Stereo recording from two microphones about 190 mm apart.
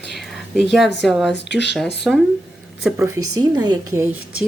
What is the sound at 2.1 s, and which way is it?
Speech, centre (ahead or behind).